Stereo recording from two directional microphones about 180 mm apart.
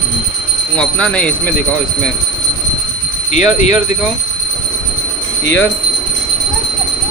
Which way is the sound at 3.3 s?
40° left (ahead or behind).